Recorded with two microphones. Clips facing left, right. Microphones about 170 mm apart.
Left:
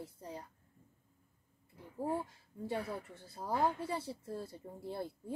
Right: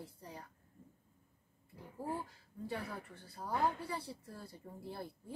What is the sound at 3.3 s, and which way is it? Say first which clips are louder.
A woman's voice: left 2 dB; 25° left (ahead or behind).